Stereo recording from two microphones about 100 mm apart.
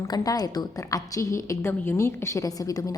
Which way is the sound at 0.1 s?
40° left (ahead or behind).